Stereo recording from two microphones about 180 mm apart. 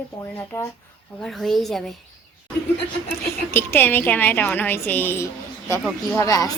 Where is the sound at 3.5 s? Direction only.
10° left (ahead or behind).